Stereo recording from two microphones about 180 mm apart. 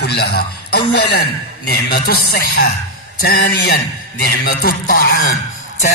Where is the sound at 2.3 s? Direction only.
60° left (ahead or behind).